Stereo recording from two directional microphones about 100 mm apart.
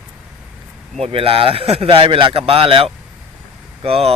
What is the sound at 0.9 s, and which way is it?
Speech, 75° right (ahead or behind).